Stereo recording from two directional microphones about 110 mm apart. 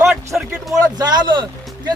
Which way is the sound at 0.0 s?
25° right (ahead or behind).